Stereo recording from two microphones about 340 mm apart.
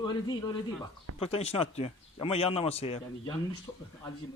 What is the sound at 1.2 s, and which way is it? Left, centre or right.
A man's voice, centre.